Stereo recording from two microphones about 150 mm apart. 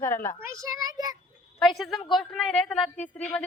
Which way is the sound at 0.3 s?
20° right (ahead or behind).